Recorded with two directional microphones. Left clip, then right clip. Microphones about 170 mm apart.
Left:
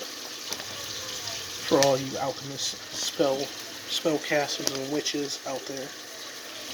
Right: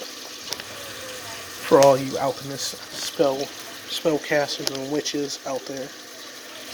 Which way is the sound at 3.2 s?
15° right (ahead or behind).